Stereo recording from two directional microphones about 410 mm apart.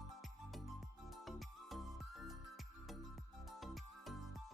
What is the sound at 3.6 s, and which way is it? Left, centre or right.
Music, centre.